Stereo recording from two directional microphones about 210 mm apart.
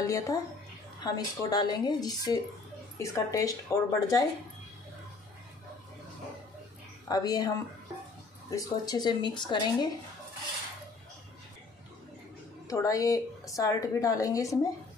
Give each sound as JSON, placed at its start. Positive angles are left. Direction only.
{"t": 0.0, "sound": "a woman's voice", "side_deg": 15}
{"t": 7.1, "sound": "a woman's voice", "side_deg": 20}
{"t": 12.6, "sound": "a woman's voice", "side_deg": 15}